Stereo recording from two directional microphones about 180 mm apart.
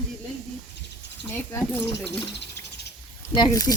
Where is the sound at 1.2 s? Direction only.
10° left (ahead or behind).